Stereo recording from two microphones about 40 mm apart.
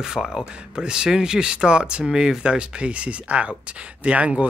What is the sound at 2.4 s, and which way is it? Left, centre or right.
Speech, right.